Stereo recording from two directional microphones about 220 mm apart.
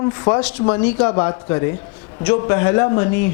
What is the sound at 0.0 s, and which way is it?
A man's voice, 15° left (ahead or behind).